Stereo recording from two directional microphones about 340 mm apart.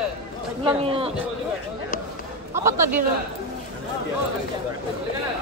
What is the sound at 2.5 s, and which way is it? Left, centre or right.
Speech, centre.